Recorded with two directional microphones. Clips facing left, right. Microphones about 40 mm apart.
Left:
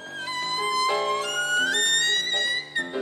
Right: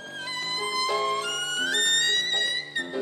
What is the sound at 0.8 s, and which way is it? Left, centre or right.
Music, left.